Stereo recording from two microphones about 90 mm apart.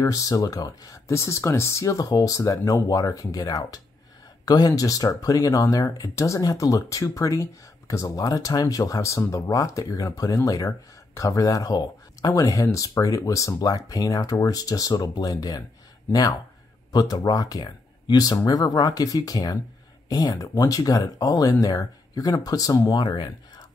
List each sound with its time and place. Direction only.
0.0 s speech: 40° left (ahead or behind)
4.5 s speech: 45° left (ahead or behind)